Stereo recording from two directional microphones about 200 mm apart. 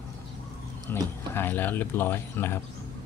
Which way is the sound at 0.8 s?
10° left (ahead or behind).